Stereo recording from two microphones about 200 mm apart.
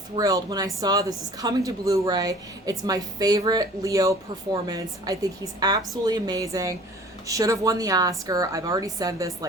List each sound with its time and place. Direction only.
0.2 s a woman's voice: 20° right (ahead or behind)